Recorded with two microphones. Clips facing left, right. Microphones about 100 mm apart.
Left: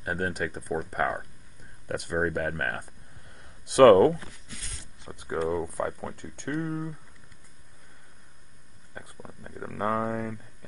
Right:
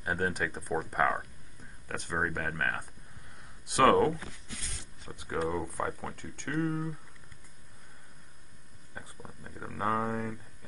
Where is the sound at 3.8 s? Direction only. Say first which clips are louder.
Left 8 dB; 50° left (ahead or behind).